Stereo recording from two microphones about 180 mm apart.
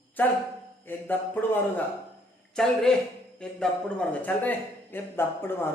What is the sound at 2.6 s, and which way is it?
A man's voice, 5° left (ahead or behind).